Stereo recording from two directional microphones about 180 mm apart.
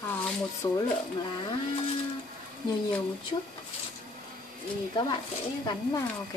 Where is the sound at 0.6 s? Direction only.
20° left (ahead or behind).